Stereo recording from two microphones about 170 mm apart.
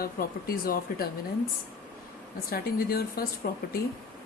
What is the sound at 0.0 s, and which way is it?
Speech, 60° left (ahead or behind).